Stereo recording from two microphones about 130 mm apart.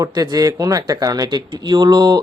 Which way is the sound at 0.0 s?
30° right (ahead or behind).